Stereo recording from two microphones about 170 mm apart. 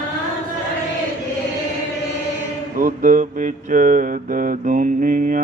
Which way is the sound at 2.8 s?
50° right (ahead or behind).